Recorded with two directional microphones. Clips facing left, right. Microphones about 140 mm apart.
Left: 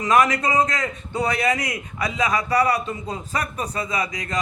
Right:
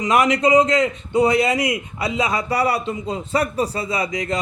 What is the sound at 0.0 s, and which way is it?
A man's voice, 25° right (ahead or behind).